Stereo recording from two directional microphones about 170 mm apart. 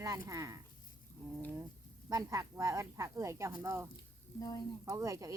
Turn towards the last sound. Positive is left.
turn(degrees=-20)  # may be behind; listen again after turning